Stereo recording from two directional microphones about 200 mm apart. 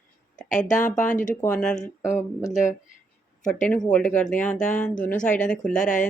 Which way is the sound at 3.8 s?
5° left (ahead or behind).